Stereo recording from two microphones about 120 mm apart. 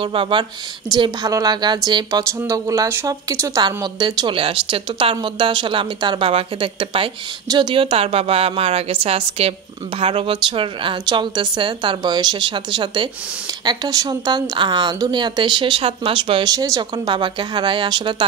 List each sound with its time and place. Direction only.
0.0 s speech: 45° right (ahead or behind)
0.9 s a woman's voice: 35° right (ahead or behind)
4.4 s a woman's voice: 50° right (ahead or behind)
16.4 s a woman's voice: 30° right (ahead or behind)